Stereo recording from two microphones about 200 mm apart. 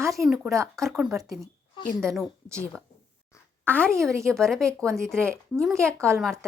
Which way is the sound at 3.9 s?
15° right (ahead or behind).